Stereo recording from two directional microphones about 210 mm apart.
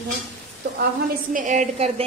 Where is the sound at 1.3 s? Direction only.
35° right (ahead or behind).